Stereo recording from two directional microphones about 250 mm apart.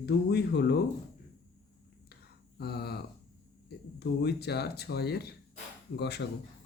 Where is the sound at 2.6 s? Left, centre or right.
Left.